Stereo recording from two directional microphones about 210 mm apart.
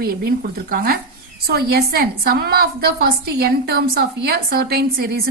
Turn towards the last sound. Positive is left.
turn(degrees=-50)  # may be behind; listen again after turning